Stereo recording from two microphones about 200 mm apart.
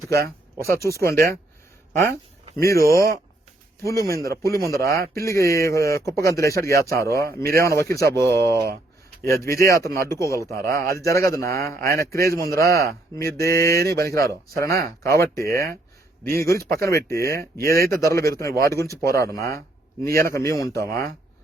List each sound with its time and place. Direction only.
0.3 s a man's voice: 15° left (ahead or behind)
4.1 s a man's voice: 15° left (ahead or behind)